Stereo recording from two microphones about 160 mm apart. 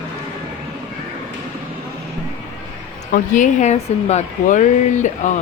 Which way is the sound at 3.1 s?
50° left (ahead or behind).